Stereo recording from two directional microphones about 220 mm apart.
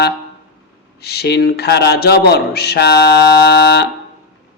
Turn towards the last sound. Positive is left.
turn(degrees=50)  # may be behind; listen again after turning